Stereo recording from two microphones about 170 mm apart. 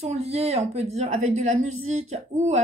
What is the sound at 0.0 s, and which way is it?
A woman's voice, 35° right (ahead or behind).